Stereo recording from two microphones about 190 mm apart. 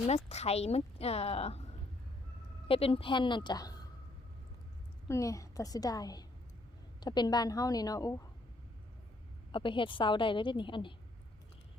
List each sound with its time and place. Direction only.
0.3 s a woman's voice: 35° left (ahead or behind)
5.0 s a woman's voice: 15° left (ahead or behind)
9.5 s a woman's voice: 25° left (ahead or behind)